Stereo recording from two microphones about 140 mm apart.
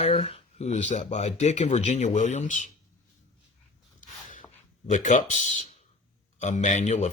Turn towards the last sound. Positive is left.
turn(degrees=55)  # may be behind; listen again after turning